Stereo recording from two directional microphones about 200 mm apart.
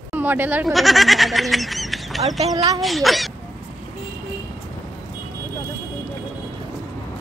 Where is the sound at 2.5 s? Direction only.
20° right (ahead or behind).